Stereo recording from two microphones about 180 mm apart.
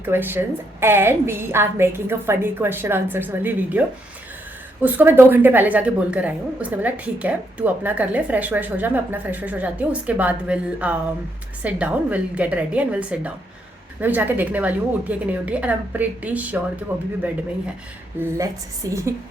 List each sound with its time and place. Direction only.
0.0 s speech: 10° right (ahead or behind)
18.2 s a woman's voice: 10° right (ahead or behind)